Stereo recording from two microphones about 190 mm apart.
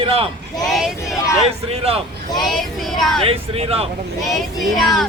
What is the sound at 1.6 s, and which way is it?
Speech, 30° right (ahead or behind).